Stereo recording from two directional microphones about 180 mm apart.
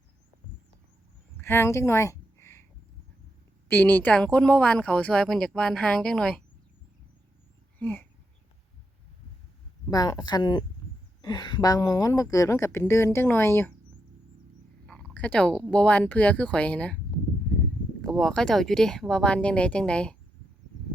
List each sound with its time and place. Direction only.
1.4 s a sound: 15° left (ahead or behind)
3.7 s speech: 10° left (ahead or behind)
7.8 s speech: 10° left (ahead or behind)
9.9 s a woman's voice: 20° left (ahead or behind)
14.8 s a sound: 5° left (ahead or behind)
15.7 s a woman's voice: 5° left (ahead or behind)
18.0 s speech: centre (ahead or behind)